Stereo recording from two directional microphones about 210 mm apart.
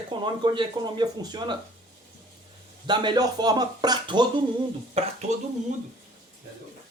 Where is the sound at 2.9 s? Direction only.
20° right (ahead or behind).